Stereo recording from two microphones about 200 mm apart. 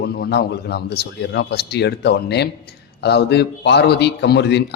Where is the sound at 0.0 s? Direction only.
55° left (ahead or behind).